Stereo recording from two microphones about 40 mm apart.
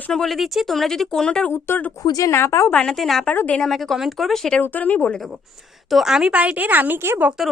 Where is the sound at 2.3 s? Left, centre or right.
Left.